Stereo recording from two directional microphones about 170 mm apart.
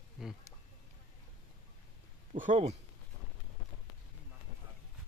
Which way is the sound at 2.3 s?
45° right (ahead or behind).